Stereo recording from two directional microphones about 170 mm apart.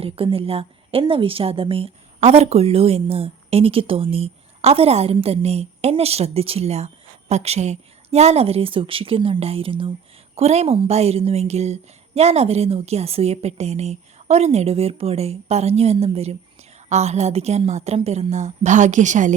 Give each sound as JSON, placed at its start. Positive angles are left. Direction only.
{"t": 0.0, "sound": "a woman's voice", "side_deg": -35}